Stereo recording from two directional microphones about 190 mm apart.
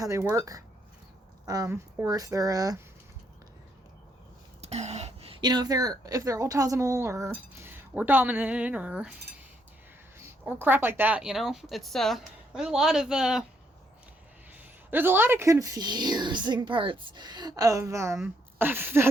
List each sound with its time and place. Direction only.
0.0 s a woman's voice: 15° right (ahead or behind)
4.6 s a woman's voice: 35° right (ahead or behind); by 13.4 s 5° right (ahead or behind)
14.5 s speech: 10° right (ahead or behind)